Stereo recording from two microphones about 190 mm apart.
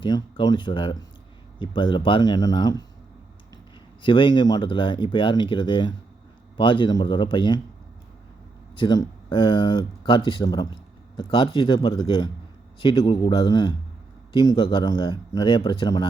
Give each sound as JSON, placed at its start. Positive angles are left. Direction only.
{"t": 0.0, "sound": "speech", "side_deg": 25}
{"t": 4.0, "sound": "speech", "side_deg": 25}
{"t": 8.7, "sound": "speech", "side_deg": 25}